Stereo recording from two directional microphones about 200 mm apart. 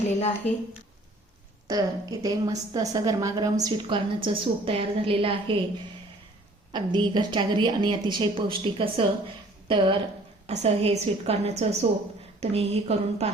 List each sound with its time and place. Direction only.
0.0 s a woman's voice: 30° left (ahead or behind)
1.6 s a woman's voice: 20° right (ahead or behind)
6.7 s a woman's voice: 20° right (ahead or behind)